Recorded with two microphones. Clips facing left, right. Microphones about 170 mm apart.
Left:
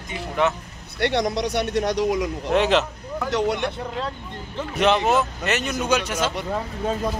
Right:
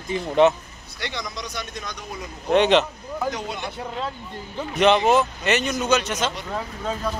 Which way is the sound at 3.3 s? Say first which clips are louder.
Left 8 dB; 70° left (ahead or behind).